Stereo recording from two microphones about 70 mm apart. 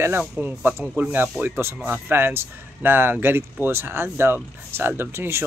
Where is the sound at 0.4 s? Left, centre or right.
Right.